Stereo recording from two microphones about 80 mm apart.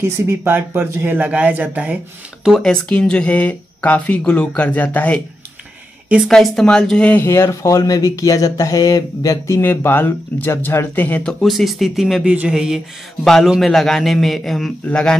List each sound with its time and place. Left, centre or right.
0.0 s speech: right
2.6 s speech: centre
6.2 s speech: centre
7.2 s speech: left
9.6 s speech: left
11.4 s a man's voice: centre
13.2 s a man's voice: centre